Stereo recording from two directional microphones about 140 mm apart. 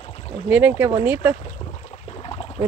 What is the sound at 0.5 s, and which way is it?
Speech, 15° right (ahead or behind).